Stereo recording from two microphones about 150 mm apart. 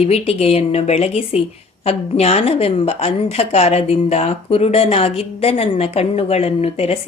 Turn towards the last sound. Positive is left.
turn(degrees=45)  # may be behind; listen again after turning